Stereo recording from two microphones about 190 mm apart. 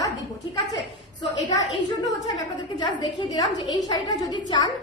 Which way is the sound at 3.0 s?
20° left (ahead or behind).